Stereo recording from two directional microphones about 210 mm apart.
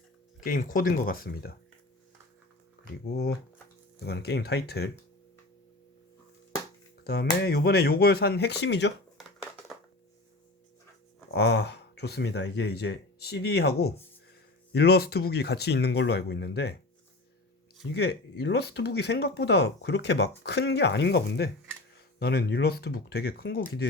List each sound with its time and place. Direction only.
0.3 s speech: 40° left (ahead or behind)
4.0 s speech: 50° left (ahead or behind)
7.0 s speech: 45° left (ahead or behind)
9.1 s a sound: centre (ahead or behind)
11.3 s speech: 55° left (ahead or behind)
17.9 s speech: 50° left (ahead or behind)